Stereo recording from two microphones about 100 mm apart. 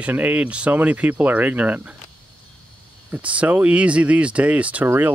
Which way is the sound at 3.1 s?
15° right (ahead or behind).